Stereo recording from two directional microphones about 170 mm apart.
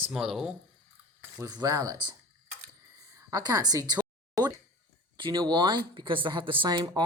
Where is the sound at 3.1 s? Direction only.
20° right (ahead or behind).